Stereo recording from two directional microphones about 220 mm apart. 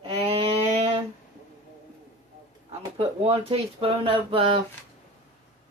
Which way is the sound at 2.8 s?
25° right (ahead or behind).